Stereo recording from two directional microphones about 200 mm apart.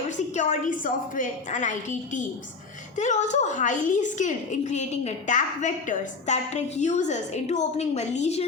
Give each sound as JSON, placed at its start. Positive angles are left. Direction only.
{"t": 0.3, "sound": "a woman's voice", "side_deg": 40}
{"t": 3.0, "sound": "a woman's voice", "side_deg": 35}